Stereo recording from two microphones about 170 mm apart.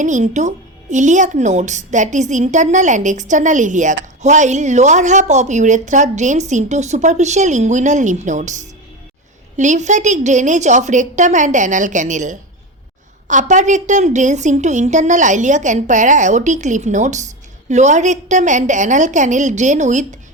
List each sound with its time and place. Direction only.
0.0 s a woman's voice: 45° right (ahead or behind)